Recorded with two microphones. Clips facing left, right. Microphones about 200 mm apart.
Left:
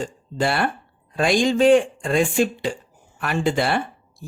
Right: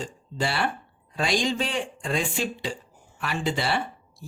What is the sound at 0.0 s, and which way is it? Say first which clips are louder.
A woman's voice: left 6 dB; 55° left (ahead or behind).